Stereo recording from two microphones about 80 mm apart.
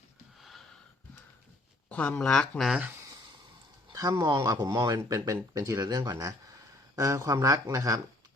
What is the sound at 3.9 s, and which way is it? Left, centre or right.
Speech, right.